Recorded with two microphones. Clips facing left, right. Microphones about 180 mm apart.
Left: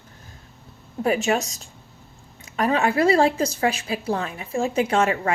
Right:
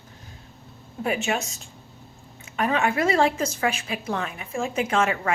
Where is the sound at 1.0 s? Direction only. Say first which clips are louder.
Left 4 dB; 35° left (ahead or behind).